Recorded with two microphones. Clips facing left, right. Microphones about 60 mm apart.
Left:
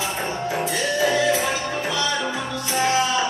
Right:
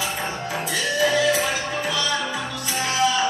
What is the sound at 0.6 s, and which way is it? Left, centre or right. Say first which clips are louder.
Music: right 1 dB; left.